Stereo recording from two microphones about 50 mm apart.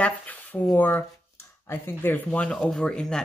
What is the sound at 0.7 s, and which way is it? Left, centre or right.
Speech, left.